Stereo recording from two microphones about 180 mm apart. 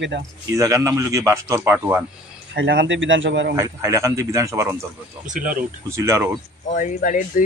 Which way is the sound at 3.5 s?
15° right (ahead or behind).